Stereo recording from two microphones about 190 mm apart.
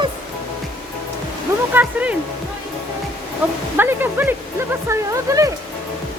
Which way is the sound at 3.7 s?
10° right (ahead or behind).